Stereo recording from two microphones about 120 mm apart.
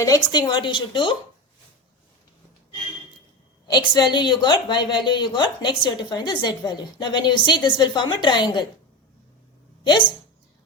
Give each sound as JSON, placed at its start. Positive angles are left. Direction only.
{"t": 0.0, "sound": "a woman's voice", "side_deg": 30}
{"t": 3.7, "sound": "a woman's voice", "side_deg": 40}